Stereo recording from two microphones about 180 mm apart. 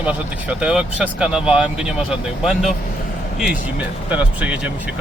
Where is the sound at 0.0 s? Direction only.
5° right (ahead or behind).